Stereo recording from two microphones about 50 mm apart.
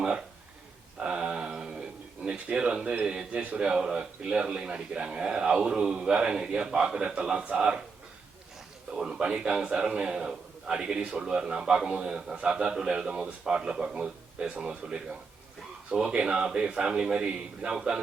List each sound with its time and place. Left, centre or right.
0.9 s a sound: centre
3.0 s a man's voice: centre
8.9 s a man's voice: centre